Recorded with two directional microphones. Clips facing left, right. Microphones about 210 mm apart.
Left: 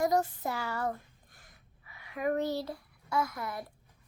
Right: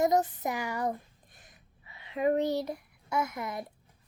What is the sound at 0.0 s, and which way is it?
A woman's voice, 20° right (ahead or behind).